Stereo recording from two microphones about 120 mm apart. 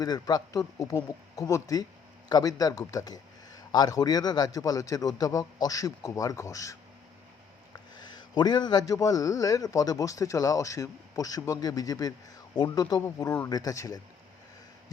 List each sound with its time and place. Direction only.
0.0 s speech: 35° left (ahead or behind)
7.7 s a sound: 35° left (ahead or behind)
8.9 s speech: 30° left (ahead or behind)